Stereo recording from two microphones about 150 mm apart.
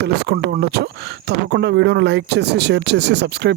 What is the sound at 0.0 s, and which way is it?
Speech, 90° right.